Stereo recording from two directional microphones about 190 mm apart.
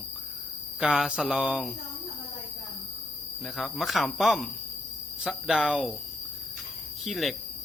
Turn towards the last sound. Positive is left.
turn(degrees=0)  # may be behind; listen again after turning